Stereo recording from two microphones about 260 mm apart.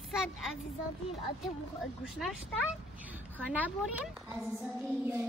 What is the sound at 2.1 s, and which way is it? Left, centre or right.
Speech, centre.